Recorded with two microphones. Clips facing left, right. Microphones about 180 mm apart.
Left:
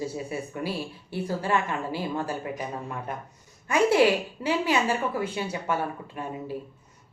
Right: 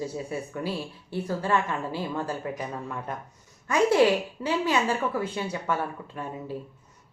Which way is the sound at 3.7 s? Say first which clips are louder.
Even; 10° left (ahead or behind).